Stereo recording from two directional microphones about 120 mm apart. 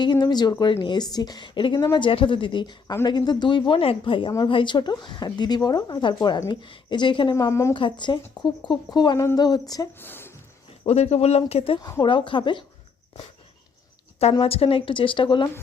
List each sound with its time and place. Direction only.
0.0 s a woman's voice: 40° left (ahead or behind)
7.3 s a woman's voice: 25° left (ahead or behind)
7.7 s a woman's voice: 40° left (ahead or behind)
10.0 s a sound: 20° left (ahead or behind)
10.8 s speech: 65° left (ahead or behind)
11.8 s a woman's voice: 30° left (ahead or behind)
12.0 s speech: 45° left (ahead or behind)
14.4 s speech: 55° left (ahead or behind)